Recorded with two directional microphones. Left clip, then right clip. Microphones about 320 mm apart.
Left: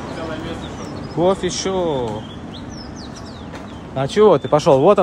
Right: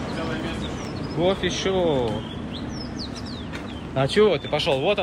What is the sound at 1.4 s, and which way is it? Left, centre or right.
Speech, left.